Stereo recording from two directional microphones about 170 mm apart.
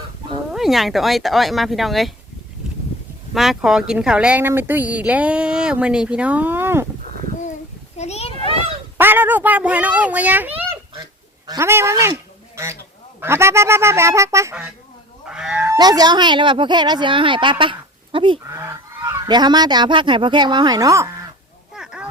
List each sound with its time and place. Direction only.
0.5 s speech: centre (ahead or behind)
2.6 s a sound: 5° right (ahead or behind)
3.3 s speech: centre (ahead or behind)
7.9 s children playing: 40° left (ahead or behind)
9.0 s speech: 10° right (ahead or behind)
15.3 s goose: 5° right (ahead or behind)
15.6 s speech: 20° right (ahead or behind)
18.4 s goose: 15° right (ahead or behind)
21.7 s a sound: 5° right (ahead or behind)